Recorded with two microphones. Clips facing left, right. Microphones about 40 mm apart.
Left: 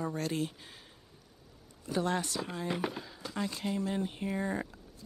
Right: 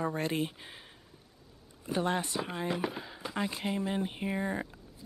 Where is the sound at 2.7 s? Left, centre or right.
Centre.